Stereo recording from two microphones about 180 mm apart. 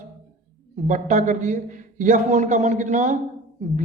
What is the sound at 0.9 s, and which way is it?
A man's voice, 45° right (ahead or behind).